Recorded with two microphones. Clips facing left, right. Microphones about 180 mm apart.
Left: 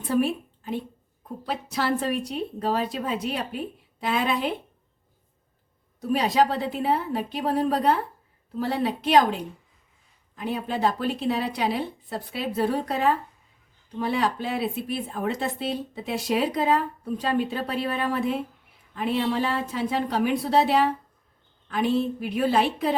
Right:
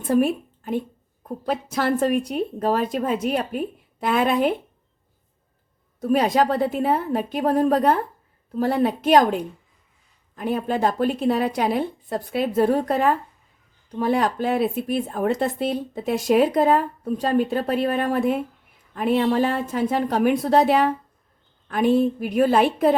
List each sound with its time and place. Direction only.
0.0 s speech: 50° right (ahead or behind)
6.0 s speech: 50° right (ahead or behind)